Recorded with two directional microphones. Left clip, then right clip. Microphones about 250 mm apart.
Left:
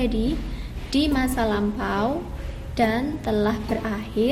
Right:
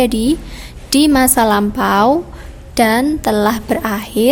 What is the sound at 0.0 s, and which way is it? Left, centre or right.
A woman's voice, right.